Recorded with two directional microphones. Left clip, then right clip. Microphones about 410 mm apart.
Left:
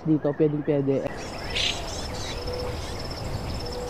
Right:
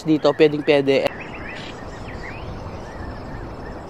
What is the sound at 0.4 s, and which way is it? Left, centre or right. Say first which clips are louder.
Speech: right 8 dB; centre.